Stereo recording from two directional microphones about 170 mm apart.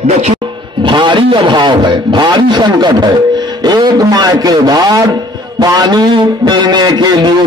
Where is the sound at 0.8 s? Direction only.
30° right (ahead or behind).